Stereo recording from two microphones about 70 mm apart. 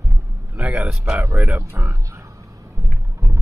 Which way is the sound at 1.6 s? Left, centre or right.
Right.